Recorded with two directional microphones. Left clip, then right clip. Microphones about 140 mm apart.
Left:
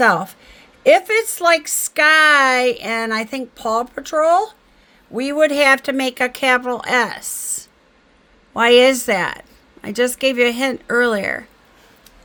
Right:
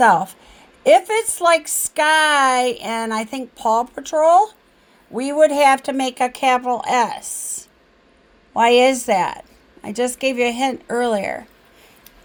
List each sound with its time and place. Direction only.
0.0 s a woman's voice: 35° left (ahead or behind)
8.5 s a woman's voice: 45° left (ahead or behind)